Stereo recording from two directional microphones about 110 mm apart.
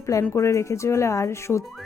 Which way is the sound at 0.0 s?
30° left (ahead or behind).